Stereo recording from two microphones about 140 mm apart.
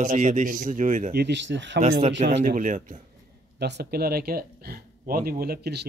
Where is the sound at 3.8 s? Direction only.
90° right.